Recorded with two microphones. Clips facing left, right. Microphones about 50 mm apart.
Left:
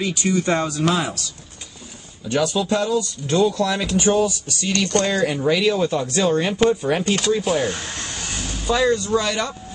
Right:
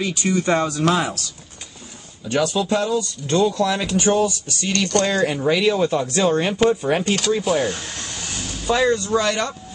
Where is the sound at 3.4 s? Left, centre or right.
Centre.